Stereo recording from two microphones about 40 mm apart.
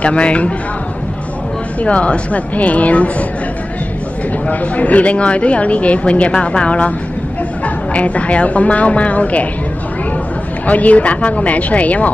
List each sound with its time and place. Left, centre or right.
0.0 s speech: left
1.8 s speech: left
4.5 s speech: left
10.7 s speech: left